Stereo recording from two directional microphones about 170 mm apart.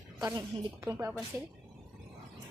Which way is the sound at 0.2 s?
25° right (ahead or behind).